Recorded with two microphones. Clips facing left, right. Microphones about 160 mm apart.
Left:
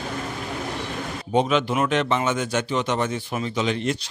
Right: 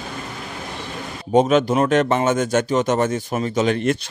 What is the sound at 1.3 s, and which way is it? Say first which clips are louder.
Speech: right 6 dB; 45° right (ahead or behind).